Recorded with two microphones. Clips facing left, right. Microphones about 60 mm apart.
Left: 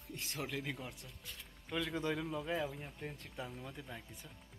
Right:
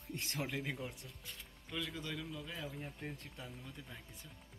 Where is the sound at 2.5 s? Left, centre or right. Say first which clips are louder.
Left 6 dB; centre.